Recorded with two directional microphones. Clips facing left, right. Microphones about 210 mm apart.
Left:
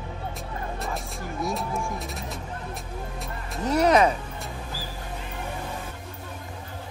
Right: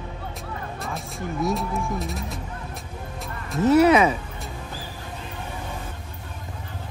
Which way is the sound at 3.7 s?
5° right (ahead or behind).